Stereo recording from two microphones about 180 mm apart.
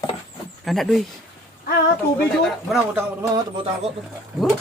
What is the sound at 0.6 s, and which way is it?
Speech, centre (ahead or behind).